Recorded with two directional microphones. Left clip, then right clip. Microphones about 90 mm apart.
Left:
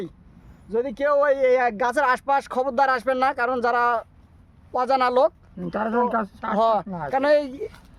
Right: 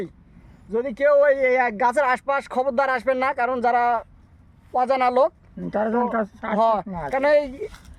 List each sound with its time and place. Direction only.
0.7 s speech: 10° left (ahead or behind)